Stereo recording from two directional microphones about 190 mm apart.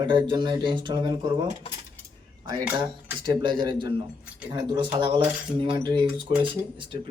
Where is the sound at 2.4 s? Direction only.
20° right (ahead or behind).